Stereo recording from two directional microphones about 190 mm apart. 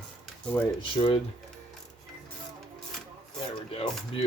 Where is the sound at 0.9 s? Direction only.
30° left (ahead or behind).